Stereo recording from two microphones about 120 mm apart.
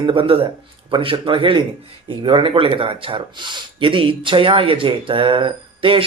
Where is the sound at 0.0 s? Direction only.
45° right (ahead or behind).